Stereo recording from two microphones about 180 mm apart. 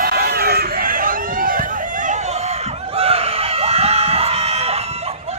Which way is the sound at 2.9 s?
35° right (ahead or behind).